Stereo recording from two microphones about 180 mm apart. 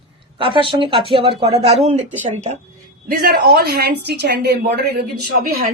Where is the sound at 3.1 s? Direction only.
55° right (ahead or behind).